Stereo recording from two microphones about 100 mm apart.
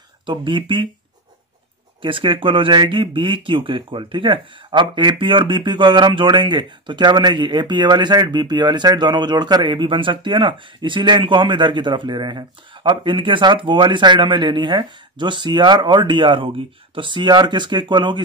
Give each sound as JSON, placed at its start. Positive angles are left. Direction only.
{"t": 0.3, "sound": "speech", "side_deg": -55}
{"t": 2.0, "sound": "speech", "side_deg": -60}